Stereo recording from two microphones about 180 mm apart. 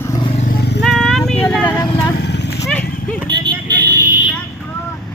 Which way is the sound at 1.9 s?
20° left (ahead or behind).